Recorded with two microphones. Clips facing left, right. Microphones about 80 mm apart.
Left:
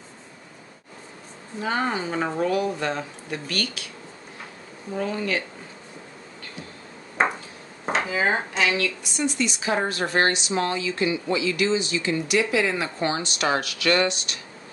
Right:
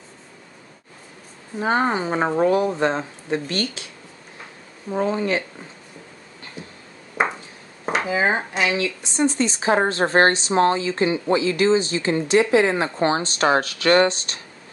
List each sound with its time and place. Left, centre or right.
1.6 s a woman's voice: right
4.9 s speech: right
8.1 s a woman's voice: right